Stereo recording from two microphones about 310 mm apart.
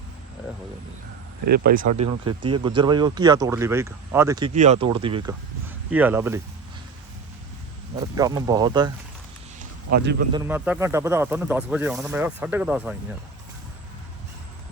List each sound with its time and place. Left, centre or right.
1.5 s speech: right
2.4 s speech: centre
8.1 s speech: centre
9.6 s a sound: right
10.3 s speech: centre